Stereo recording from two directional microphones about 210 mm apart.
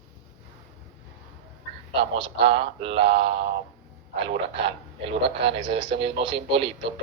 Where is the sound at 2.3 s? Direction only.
25° right (ahead or behind).